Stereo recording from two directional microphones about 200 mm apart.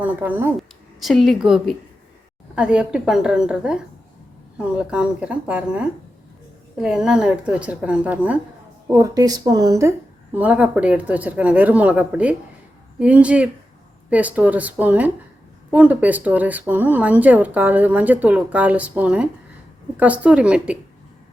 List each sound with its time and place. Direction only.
0.0 s a woman's voice: 10° right (ahead or behind)
8.9 s a woman's voice: 15° right (ahead or behind)